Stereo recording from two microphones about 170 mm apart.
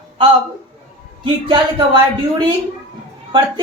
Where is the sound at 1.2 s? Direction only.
30° right (ahead or behind).